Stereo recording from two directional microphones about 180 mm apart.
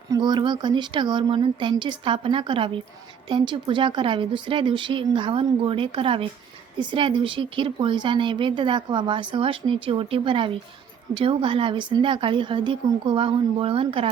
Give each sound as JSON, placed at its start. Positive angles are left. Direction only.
{"t": 0.1, "sound": "a woman's voice", "side_deg": -25}